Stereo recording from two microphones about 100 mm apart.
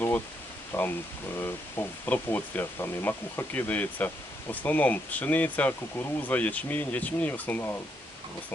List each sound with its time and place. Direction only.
0.7 s speech: 20° left (ahead or behind)